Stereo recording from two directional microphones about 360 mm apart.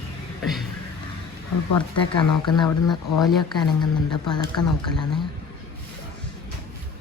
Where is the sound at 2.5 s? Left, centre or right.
Centre.